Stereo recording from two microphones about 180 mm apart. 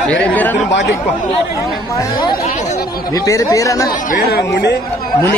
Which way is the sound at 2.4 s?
40° left (ahead or behind).